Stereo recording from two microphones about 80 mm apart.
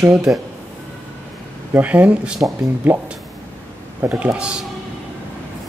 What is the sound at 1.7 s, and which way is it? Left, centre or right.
Speech, centre.